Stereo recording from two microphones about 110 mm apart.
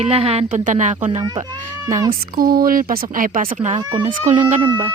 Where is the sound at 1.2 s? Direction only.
40° right (ahead or behind).